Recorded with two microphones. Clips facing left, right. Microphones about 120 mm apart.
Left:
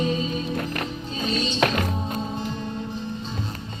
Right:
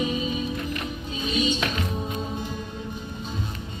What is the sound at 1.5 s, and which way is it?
Music, 55° left (ahead or behind).